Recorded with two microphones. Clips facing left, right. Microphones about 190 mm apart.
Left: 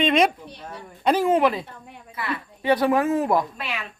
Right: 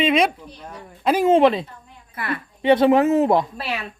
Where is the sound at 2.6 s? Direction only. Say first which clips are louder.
Right 5 dB; 25° right (ahead or behind).